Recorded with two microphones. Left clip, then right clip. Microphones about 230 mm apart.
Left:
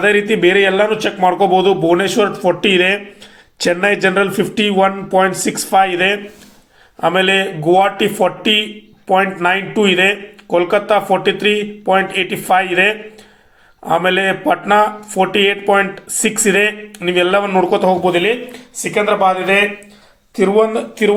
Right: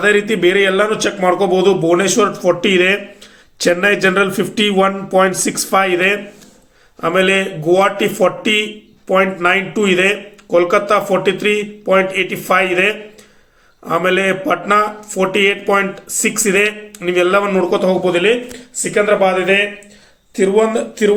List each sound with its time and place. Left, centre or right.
0.0 s speech: centre